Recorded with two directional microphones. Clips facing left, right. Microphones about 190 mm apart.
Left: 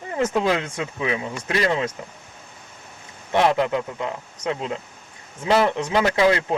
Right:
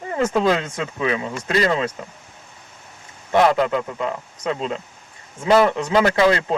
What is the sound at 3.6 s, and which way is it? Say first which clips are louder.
Speech: right 2 dB; 15° left (ahead or behind).